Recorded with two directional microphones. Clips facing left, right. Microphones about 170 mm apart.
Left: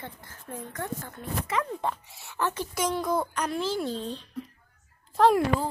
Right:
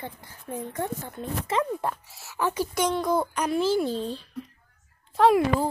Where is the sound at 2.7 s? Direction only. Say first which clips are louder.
Right 2 dB; 5° left (ahead or behind).